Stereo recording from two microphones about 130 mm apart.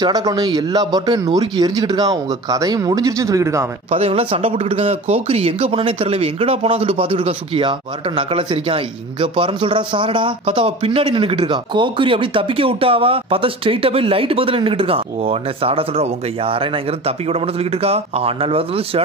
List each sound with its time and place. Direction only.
0.0 s a man's voice: 30° right (ahead or behind)
3.9 s speech: 50° right (ahead or behind)
17.8 s speech: 50° right (ahead or behind)